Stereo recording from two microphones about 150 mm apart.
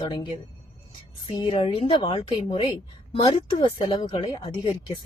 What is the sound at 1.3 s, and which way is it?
Speech, 35° left (ahead or behind).